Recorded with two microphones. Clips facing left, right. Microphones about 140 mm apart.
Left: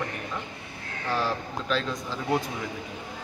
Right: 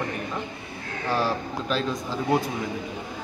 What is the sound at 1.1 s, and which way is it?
Speech, 10° right (ahead or behind).